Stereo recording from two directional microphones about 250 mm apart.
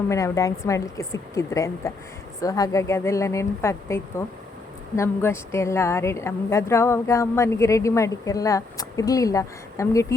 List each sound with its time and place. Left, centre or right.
0.1 s speech: centre